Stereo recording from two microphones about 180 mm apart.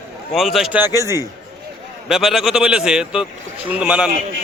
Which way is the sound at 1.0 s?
15° right (ahead or behind).